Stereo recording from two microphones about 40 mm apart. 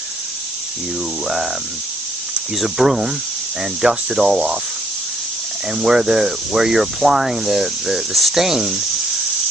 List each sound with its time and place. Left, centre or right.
2.6 s speech: centre
5.7 s speech: centre
8.4 s speech: centre